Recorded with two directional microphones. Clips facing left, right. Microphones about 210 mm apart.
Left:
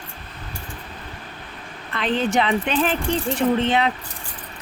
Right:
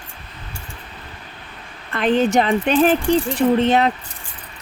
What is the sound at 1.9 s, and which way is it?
Speech, 45° right (ahead or behind).